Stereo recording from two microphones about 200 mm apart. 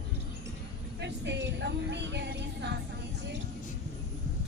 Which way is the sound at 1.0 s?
60° right (ahead or behind).